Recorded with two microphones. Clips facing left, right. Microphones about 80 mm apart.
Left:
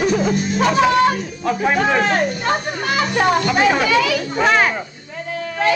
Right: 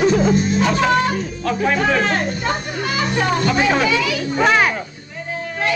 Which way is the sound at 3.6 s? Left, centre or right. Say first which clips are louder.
Left 1 dB; centre.